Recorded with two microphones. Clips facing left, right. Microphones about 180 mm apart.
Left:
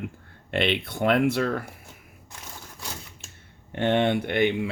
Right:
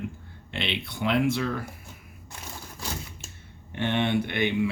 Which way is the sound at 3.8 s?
50° left (ahead or behind).